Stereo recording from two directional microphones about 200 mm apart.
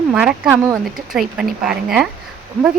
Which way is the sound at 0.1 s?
5° right (ahead or behind).